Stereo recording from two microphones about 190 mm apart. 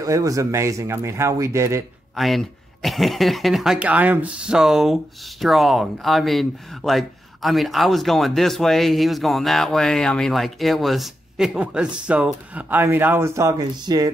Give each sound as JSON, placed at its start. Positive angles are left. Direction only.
{"t": 0.0, "sound": "speech", "side_deg": -15}
{"t": 2.1, "sound": "speech", "side_deg": 0}